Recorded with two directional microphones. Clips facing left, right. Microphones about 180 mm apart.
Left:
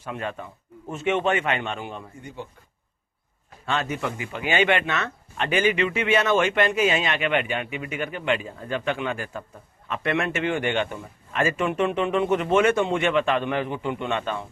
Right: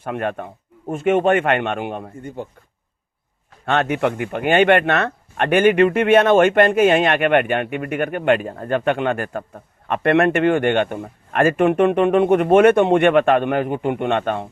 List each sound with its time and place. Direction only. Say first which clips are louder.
0.0 s speech: right 7 dB; 60° right (ahead or behind)
3.7 s speech: right 8 dB; 65° right (ahead or behind)